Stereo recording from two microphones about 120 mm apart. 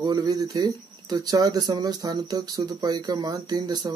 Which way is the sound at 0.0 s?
35° right (ahead or behind).